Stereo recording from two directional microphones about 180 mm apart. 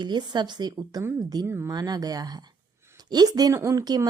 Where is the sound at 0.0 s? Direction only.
25° right (ahead or behind).